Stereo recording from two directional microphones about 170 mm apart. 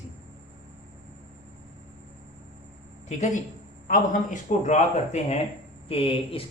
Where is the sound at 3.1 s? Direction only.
45° left (ahead or behind).